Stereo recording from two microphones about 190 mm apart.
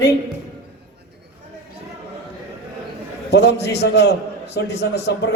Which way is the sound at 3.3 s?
60° left (ahead or behind).